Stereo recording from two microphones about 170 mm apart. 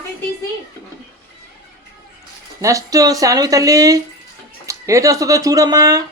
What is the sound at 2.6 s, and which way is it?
Speech, 20° right (ahead or behind).